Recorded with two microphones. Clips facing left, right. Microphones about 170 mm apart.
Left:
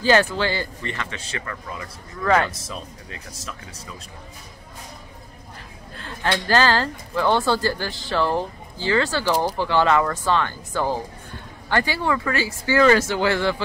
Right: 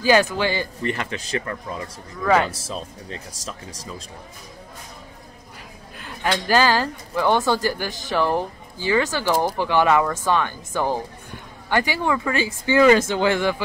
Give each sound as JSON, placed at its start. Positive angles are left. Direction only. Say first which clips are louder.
{"t": 0.0, "sound": "speech", "louder": "right 1 dB", "side_deg": -15}
{"t": 0.9, "sound": "speech", "louder": "right 5 dB", "side_deg": -35}
{"t": 2.2, "sound": "speech", "louder": "right 1 dB", "side_deg": -10}
{"t": 5.9, "sound": "speech", "louder": "even", "side_deg": -15}